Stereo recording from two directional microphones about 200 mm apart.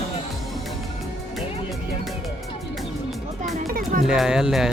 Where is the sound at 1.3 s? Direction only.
Centre (ahead or behind).